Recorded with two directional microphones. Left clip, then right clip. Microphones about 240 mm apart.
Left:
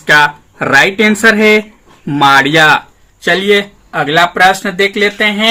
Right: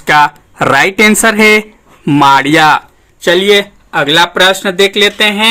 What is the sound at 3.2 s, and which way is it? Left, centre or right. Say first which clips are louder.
Speech: right 2 dB; right.